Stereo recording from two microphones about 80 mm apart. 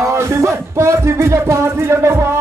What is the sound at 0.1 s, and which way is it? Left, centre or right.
Music, right.